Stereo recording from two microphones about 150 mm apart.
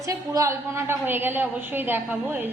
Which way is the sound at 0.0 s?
20° right (ahead or behind).